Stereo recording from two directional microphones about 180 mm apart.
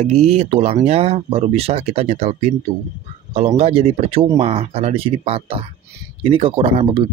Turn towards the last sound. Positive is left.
turn(degrees=-30)  # may be behind; listen again after turning